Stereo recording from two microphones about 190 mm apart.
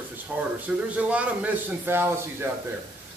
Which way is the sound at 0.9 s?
5° right (ahead or behind).